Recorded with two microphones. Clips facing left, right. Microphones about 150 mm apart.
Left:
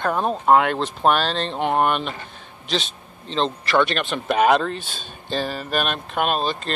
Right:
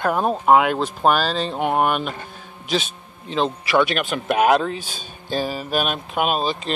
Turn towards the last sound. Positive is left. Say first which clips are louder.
# right 1 dB
turn(degrees=-5)  # may be behind; listen again after turning